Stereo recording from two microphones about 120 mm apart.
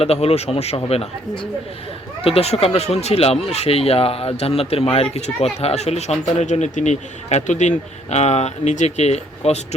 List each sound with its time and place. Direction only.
0.0 s speech: 55° left (ahead or behind); by 7.7 s 85° left
8.1 s speech: 65° left (ahead or behind)